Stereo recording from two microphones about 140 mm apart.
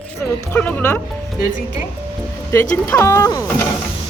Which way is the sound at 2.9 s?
20° left (ahead or behind).